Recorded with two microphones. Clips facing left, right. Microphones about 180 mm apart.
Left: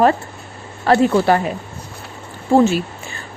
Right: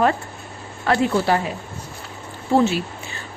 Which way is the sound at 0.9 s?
55° left (ahead or behind).